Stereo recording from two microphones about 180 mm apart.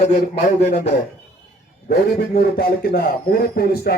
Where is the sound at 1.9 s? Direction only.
65° left (ahead or behind).